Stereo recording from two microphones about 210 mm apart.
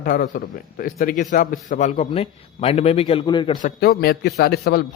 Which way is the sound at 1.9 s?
25° left (ahead or behind).